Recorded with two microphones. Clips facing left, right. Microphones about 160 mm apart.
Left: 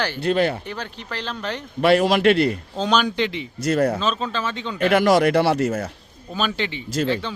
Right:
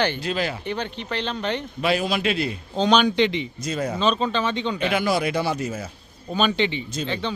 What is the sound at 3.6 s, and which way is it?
Speech, 65° left (ahead or behind).